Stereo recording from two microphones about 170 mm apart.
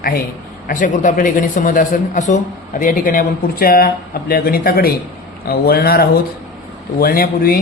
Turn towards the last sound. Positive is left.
turn(degrees=60)  # may be behind; listen again after turning